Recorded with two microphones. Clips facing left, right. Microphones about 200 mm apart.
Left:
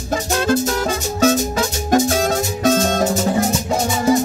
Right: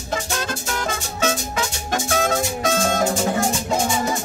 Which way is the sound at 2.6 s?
40° left (ahead or behind).